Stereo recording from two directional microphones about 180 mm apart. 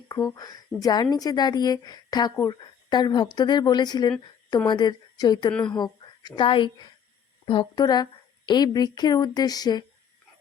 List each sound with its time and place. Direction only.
0.1 s a woman's voice: 20° left (ahead or behind)